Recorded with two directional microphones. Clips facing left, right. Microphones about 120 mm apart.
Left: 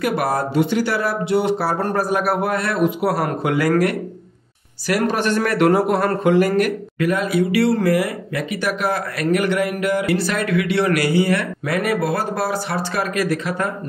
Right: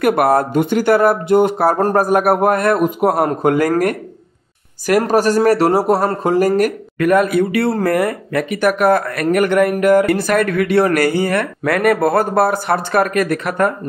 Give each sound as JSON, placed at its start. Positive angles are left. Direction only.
{"t": 0.0, "sound": "speech", "side_deg": -55}
{"t": 7.1, "sound": "speech", "side_deg": -55}